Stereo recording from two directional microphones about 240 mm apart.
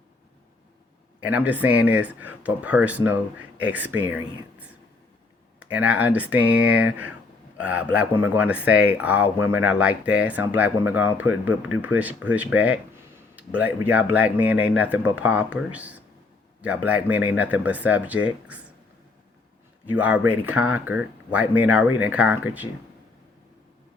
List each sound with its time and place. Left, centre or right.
1.3 s speech: centre
5.5 s speech: centre
19.9 s speech: centre